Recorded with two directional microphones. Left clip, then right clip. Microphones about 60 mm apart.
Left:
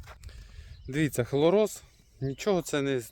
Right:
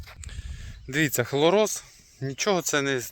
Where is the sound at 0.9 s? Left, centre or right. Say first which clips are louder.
Right 4 dB; centre.